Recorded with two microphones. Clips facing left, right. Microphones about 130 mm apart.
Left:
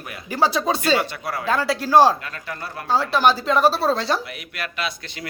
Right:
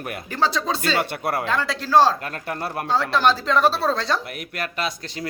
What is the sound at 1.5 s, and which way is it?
Speech, 5° left (ahead or behind).